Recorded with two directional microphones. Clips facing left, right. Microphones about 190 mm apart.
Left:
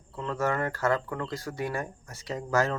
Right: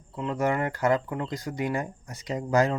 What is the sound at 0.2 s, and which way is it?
Speech, 15° right (ahead or behind).